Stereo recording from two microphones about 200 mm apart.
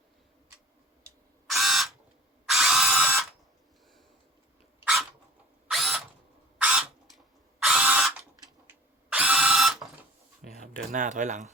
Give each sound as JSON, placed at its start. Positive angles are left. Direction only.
{"t": 1.5, "sound": "camera", "side_deg": 0}
{"t": 2.5, "sound": "ratchet", "side_deg": 0}
{"t": 5.7, "sound": "drill", "side_deg": 0}
{"t": 6.6, "sound": "a sound", "side_deg": -5}
{"t": 7.6, "sound": "ratchet", "side_deg": 0}
{"t": 8.2, "sound": "drill", "side_deg": -10}
{"t": 10.8, "sound": "speech", "side_deg": -40}